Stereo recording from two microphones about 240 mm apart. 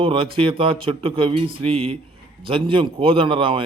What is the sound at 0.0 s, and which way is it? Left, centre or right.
Speech, right.